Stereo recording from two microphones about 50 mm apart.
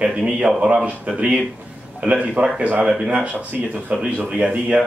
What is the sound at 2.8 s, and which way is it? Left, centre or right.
Speech, centre.